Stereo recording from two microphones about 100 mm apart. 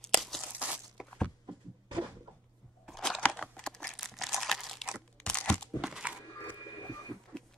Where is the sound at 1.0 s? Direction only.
5° right (ahead or behind).